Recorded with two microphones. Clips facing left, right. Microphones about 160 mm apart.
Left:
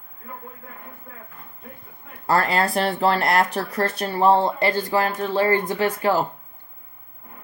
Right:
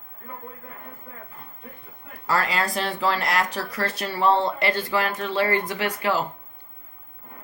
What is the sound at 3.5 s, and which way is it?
Speech, 60° left (ahead or behind).